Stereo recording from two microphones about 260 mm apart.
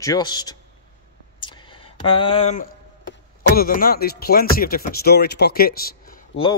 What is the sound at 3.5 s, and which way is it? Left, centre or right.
Speech, left.